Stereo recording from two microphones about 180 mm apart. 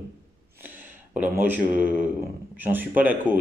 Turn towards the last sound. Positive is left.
turn(degrees=-10)  # may be behind; listen again after turning